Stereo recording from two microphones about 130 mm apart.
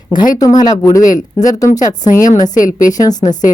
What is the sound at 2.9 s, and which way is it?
Speech, 30° left (ahead or behind).